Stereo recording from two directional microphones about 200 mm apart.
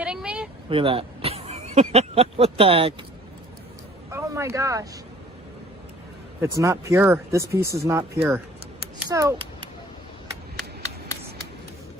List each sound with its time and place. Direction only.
0.0 s vehicle: 5° right (ahead or behind)
0.7 s speech: 25° right (ahead or behind)
4.1 s speech: 15° right (ahead or behind)
6.6 s a child's voice: 15° right (ahead or behind)